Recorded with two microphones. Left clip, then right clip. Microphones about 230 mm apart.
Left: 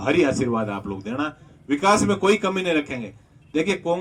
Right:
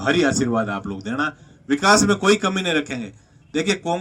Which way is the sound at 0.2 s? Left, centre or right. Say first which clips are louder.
Right 1 dB; right.